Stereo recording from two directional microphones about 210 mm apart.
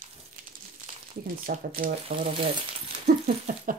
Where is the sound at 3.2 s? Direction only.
40° right (ahead or behind).